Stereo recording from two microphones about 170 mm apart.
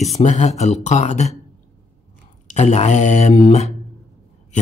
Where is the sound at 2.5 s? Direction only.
40° left (ahead or behind).